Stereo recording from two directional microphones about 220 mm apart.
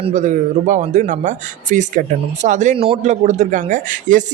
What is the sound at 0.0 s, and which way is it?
Speech, 30° right (ahead or behind).